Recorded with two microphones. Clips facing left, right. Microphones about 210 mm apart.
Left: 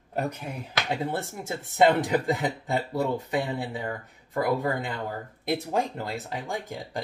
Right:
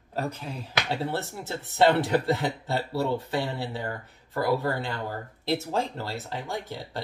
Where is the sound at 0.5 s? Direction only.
15° left (ahead or behind).